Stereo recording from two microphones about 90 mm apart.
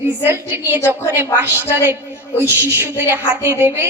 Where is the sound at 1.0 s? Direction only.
25° right (ahead or behind).